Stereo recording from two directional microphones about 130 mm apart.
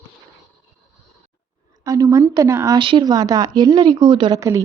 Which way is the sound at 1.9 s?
25° right (ahead or behind).